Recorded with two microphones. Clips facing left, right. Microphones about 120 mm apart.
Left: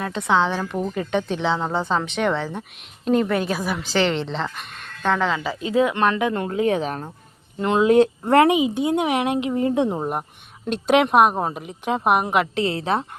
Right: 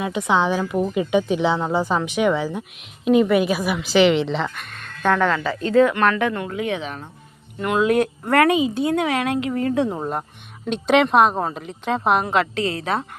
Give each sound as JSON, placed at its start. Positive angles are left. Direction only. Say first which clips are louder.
{"t": 0.3, "sound": "a woman's voice", "louder": "even", "side_deg": -15}
{"t": 6.3, "sound": "speech", "louder": "left 4 dB", "side_deg": 35}
{"t": 7.6, "sound": "speech", "louder": "left 3 dB", "side_deg": 25}